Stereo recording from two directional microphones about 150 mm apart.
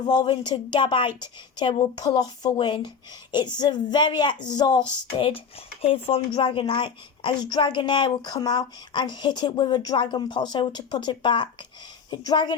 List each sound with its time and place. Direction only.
0.0 s a woman's voice: 30° left (ahead or behind)